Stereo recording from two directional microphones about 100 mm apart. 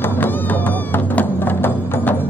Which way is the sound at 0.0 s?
20° left (ahead or behind).